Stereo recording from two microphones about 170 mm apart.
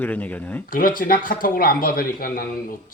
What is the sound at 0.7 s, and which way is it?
A man's voice, 55° left (ahead or behind).